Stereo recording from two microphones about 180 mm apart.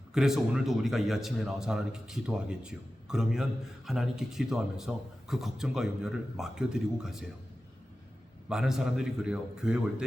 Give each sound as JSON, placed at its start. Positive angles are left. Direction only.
{"t": 0.1, "sound": "speech", "side_deg": -5}
{"t": 8.4, "sound": "speech", "side_deg": -5}